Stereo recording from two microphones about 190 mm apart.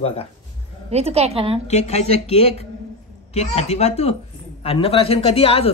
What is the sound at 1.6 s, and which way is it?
Speech, 35° left (ahead or behind).